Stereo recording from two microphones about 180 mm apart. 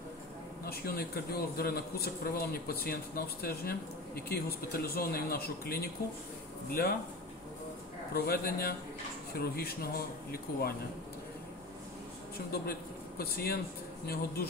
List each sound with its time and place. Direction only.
0.7 s a man's voice: 60° left (ahead or behind)
8.1 s a man's voice: 55° left (ahead or behind)
12.4 s a man's voice: 55° left (ahead or behind)